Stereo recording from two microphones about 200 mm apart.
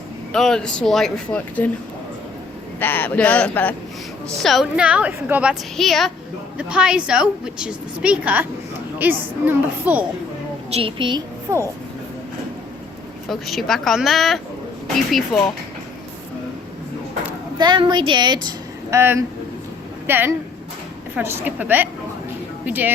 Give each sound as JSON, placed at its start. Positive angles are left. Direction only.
{"t": 0.3, "sound": "a woman's voice", "side_deg": 0}
{"t": 2.8, "sound": "a woman's voice", "side_deg": 10}
{"t": 10.7, "sound": "a woman's voice", "side_deg": -30}
{"t": 13.2, "sound": "a woman's voice", "side_deg": 0}
{"t": 17.6, "sound": "a woman's voice", "side_deg": -20}